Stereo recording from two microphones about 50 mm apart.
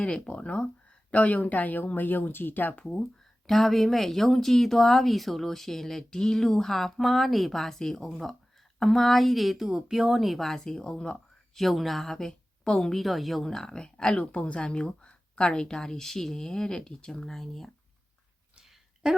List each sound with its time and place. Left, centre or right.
0.0 s speech: left
3.0 s speech: centre
11.5 s speech: centre
12.6 s a woman's voice: centre
12.9 s speech: centre
13.8 s speech: centre